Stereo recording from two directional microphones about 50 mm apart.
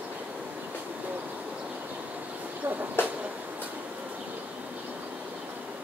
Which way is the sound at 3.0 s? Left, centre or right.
Left.